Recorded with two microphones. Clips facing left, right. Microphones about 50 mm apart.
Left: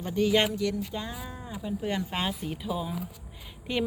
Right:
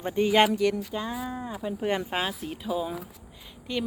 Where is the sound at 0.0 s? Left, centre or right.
Right.